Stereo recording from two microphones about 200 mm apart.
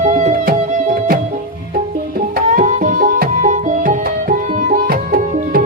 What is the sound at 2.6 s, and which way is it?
Music, 40° right (ahead or behind).